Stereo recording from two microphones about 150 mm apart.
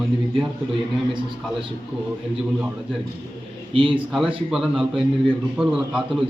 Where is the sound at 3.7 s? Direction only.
35° right (ahead or behind).